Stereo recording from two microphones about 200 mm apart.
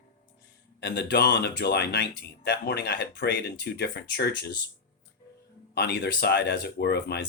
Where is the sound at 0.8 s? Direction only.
55° left (ahead or behind).